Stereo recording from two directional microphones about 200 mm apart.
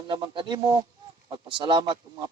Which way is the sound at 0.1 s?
20° right (ahead or behind).